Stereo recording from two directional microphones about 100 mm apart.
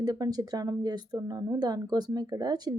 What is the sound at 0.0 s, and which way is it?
Speech, 40° right (ahead or behind).